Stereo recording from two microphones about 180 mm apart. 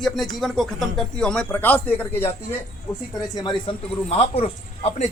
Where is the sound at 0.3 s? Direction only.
Centre (ahead or behind).